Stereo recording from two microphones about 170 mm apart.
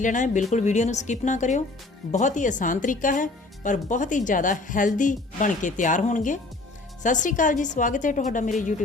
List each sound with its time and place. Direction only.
0.0 s a woman's voice: 45° left (ahead or behind)